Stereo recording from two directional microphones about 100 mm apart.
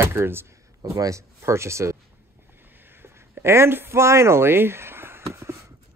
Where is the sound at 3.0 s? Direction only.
25° right (ahead or behind).